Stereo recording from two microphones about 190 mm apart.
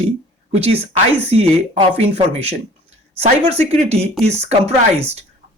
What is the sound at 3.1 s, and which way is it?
Speech, 35° right (ahead or behind).